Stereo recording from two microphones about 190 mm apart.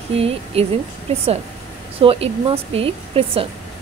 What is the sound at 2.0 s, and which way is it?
Speech, 30° right (ahead or behind).